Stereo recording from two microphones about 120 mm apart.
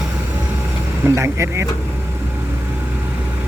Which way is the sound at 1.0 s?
25° right (ahead or behind).